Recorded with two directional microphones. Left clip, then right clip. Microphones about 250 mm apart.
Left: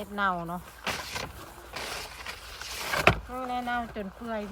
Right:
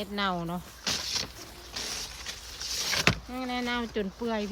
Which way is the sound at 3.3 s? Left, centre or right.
Centre.